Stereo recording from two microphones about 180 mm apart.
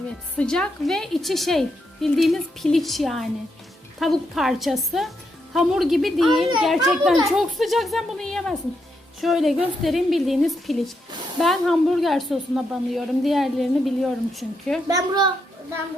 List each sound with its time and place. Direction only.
0.3 s a woman's voice: 5° left (ahead or behind)
14.8 s a child's voice: 20° right (ahead or behind)